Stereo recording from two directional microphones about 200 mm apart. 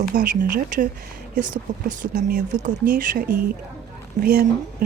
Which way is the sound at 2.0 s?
40° right (ahead or behind).